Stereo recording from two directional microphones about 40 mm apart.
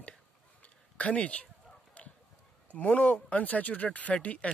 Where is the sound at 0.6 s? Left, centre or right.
Left.